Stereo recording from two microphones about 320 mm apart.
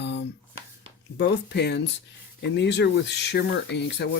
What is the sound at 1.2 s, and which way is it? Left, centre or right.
Speech, left.